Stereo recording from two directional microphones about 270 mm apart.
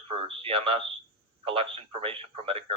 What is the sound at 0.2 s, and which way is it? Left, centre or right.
Speech, centre.